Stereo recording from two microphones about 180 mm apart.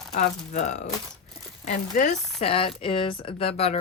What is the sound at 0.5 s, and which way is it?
Speech, 40° left (ahead or behind).